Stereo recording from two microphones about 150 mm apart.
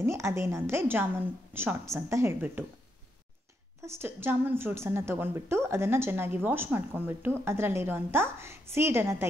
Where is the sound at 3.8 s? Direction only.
15° right (ahead or behind).